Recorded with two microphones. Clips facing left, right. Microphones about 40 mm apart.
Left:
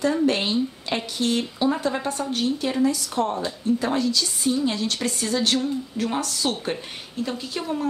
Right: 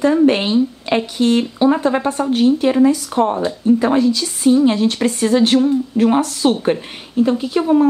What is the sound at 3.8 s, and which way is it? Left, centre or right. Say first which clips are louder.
Speech: right 8 dB; right.